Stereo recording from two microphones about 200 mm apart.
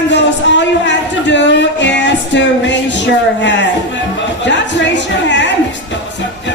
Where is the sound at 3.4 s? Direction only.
60° left (ahead or behind).